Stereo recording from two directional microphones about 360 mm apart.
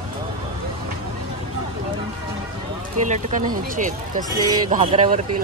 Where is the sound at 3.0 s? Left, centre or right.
Right.